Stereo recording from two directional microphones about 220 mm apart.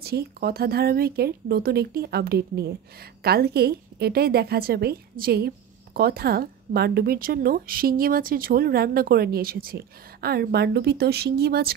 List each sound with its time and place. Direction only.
0.0 s a woman's voice: 45° right (ahead or behind)